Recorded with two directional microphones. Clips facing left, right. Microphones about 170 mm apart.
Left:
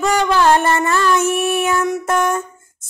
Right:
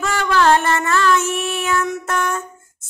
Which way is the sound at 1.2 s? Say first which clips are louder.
Left 5 dB; 55° left (ahead or behind).